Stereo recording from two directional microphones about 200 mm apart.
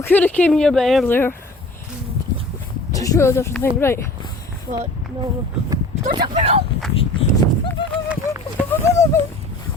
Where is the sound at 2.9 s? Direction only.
15° left (ahead or behind).